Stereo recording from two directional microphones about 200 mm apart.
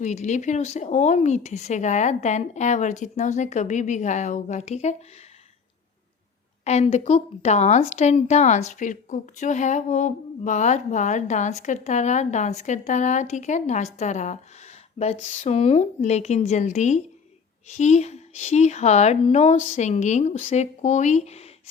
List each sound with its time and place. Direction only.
0.0 s a woman's voice: 35° left (ahead or behind)
6.7 s a woman's voice: 35° left (ahead or behind)